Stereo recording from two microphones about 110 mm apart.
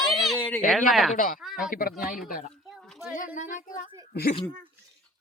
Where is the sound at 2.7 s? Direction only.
5° left (ahead or behind).